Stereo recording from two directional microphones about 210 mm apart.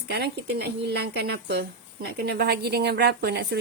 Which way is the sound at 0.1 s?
50° right (ahead or behind).